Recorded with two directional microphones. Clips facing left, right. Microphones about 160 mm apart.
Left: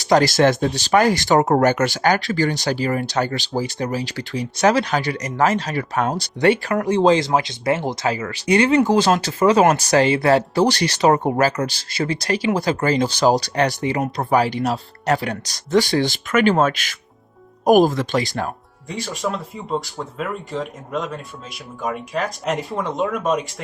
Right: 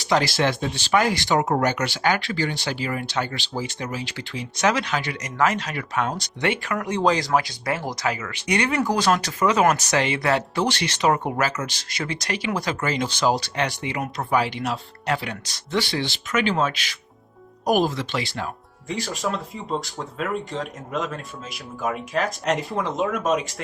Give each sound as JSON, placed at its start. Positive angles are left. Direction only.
{"t": 0.0, "sound": "speech", "side_deg": 40}
{"t": 18.9, "sound": "speech", "side_deg": 0}